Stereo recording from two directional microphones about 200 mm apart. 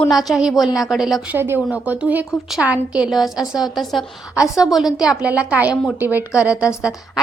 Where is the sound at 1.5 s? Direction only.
10° left (ahead or behind).